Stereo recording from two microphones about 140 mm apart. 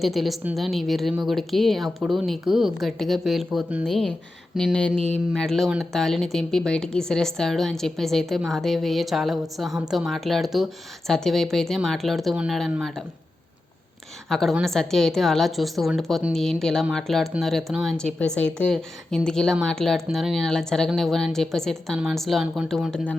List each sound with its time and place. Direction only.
0.0 s a woman's voice: centre (ahead or behind)
4.5 s mantra: 5° left (ahead or behind)
5.3 s a woman's voice: 5° left (ahead or behind)
14.3 s a woman's voice: 5° left (ahead or behind)